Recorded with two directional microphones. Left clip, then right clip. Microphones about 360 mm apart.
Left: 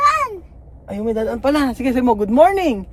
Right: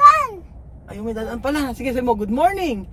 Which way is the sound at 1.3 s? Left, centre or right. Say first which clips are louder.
Left 4 dB; left.